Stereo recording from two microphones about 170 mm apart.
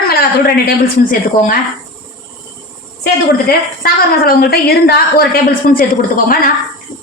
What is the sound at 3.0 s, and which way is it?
A woman's voice, 60° left (ahead or behind).